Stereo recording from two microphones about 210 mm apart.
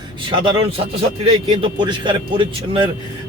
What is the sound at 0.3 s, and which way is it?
Speech, 20° right (ahead or behind).